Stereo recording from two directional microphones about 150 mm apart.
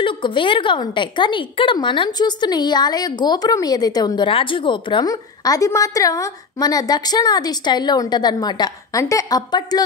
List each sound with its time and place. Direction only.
0.0 s a woman's voice: 35° left (ahead or behind)